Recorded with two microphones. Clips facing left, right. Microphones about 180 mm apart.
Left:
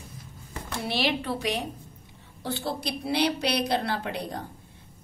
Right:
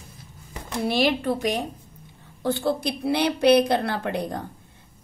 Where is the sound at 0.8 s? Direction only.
45° right (ahead or behind).